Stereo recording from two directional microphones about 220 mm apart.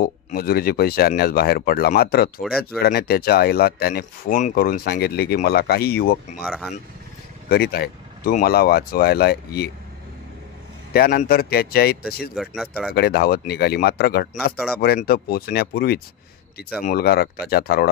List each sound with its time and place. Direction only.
0.0 s speech: 40° left (ahead or behind)
2.4 s speech: centre (ahead or behind)
2.8 s speech: 45° left (ahead or behind)
6.4 s speech: 5° right (ahead or behind)
7.4 s speech: 45° left (ahead or behind)
10.9 s speech: 45° left (ahead or behind)
12.4 s speech: centre (ahead or behind)
12.9 s speech: 45° left (ahead or behind)